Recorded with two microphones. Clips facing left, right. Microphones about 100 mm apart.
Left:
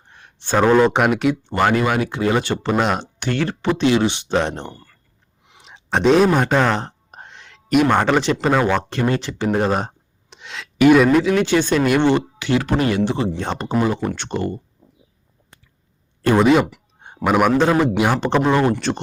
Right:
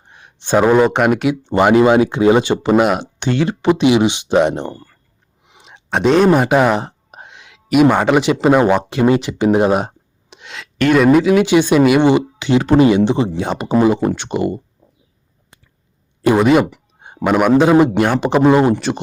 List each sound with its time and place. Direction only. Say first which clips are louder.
0.1 s a sound: right 5 dB; 15° right (ahead or behind)
0.9 s speech: right 2 dB; centre (ahead or behind)
1.5 s speech: right 10 dB; 20° right (ahead or behind)
3.2 s speech: right 5 dB; 20° right (ahead or behind)
4.7 s speech: right 8 dB; 30° right (ahead or behind)
5.6 s speech: right 1 dB; 5° right (ahead or behind); by 13.3 s 20° right (ahead or behind)
13.3 s speech: right 4 dB; 10° right (ahead or behind)
13.8 s speech: right 7 dB; 20° right (ahead or behind)
16.4 s speech: even; centre (ahead or behind)